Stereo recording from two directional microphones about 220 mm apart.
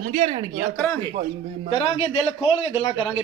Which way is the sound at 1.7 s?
25° left (ahead or behind).